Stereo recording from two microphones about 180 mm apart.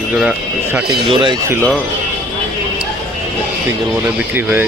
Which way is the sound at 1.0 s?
25° right (ahead or behind).